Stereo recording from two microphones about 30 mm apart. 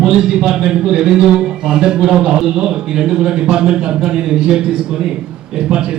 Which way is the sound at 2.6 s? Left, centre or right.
Right.